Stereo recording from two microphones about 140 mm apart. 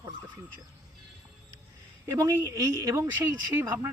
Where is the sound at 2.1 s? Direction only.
25° right (ahead or behind).